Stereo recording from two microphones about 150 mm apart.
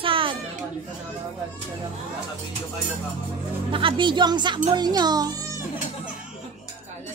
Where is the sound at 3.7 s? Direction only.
35° right (ahead or behind).